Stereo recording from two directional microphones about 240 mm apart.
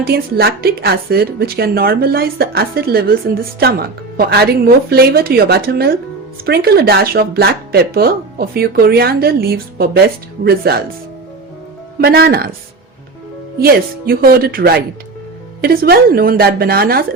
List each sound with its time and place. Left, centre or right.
0.0 s speech: right
11.9 s speech: right
13.6 s speech: right